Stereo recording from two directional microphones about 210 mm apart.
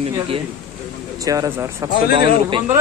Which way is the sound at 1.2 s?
15° right (ahead or behind).